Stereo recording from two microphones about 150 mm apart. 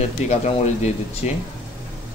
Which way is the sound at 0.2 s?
50° left (ahead or behind).